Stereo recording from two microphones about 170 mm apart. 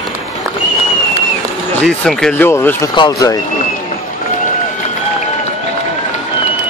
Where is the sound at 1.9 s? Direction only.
5° left (ahead or behind); by 3.3 s 20° left (ahead or behind).